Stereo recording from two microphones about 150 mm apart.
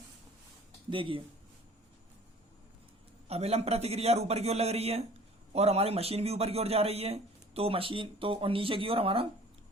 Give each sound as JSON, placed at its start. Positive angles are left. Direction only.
{"t": 0.9, "sound": "a man's voice", "side_deg": -35}
{"t": 3.2, "sound": "a man's voice", "side_deg": -45}